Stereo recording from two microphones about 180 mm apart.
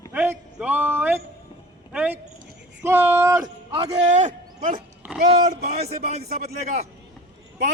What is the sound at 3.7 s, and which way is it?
A man's voice, 40° right (ahead or behind).